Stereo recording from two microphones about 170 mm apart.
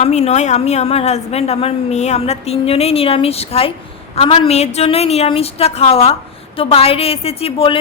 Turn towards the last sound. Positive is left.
turn(degrees=35)  # may be behind; listen again after turning